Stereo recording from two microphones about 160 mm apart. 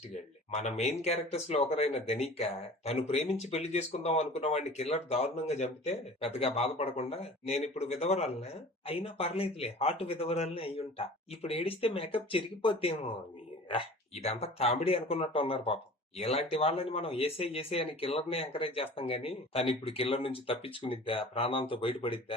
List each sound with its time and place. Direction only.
0.6 s speech: 40° left (ahead or behind)